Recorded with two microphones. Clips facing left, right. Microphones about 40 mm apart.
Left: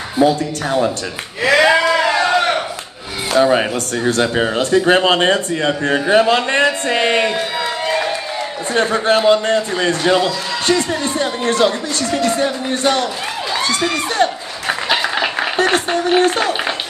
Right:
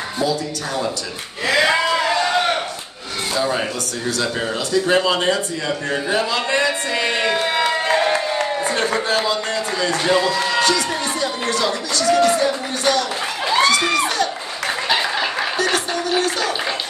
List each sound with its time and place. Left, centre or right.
0.2 s speech: left
1.4 s speech: left
3.4 s speech: left
8.7 s speech: left
14.1 s a sound: left